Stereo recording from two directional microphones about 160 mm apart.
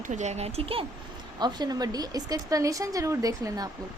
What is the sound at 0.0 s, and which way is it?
A woman's voice, 50° right (ahead or behind).